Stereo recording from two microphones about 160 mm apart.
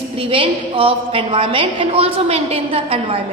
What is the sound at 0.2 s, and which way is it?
A woman's voice, 35° right (ahead or behind).